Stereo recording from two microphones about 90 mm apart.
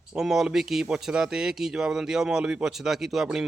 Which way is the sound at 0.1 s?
5° right (ahead or behind).